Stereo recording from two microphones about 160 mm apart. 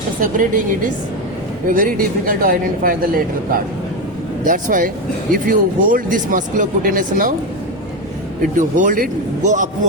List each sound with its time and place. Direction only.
0.2 s speech: 55° right (ahead or behind)
1.6 s speech: 60° right (ahead or behind)
4.4 s speech: 55° right (ahead or behind)
8.5 s a man's voice: 55° right (ahead or behind)